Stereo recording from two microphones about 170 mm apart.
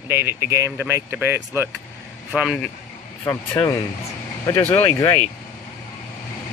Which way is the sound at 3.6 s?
15° left (ahead or behind).